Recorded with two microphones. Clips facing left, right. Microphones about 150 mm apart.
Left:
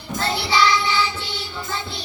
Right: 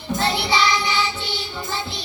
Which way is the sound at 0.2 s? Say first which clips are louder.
Left 1 dB; 20° right (ahead or behind).